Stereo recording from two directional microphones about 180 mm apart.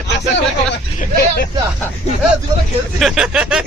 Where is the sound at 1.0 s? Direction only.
55° left (ahead or behind).